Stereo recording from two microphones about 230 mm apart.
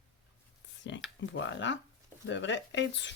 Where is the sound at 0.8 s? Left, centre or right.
Left.